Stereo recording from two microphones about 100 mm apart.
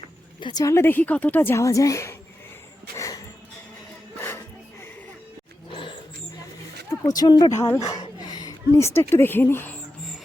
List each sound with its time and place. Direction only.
0.3 s speech: 50° left (ahead or behind)
0.6 s a woman's voice: 30° left (ahead or behind)
2.9 s a sound: 35° left (ahead or behind)
7.2 s speech: 45° left (ahead or behind)
8.3 s a sound: 40° left (ahead or behind)
8.7 s a woman's voice: 25° left (ahead or behind)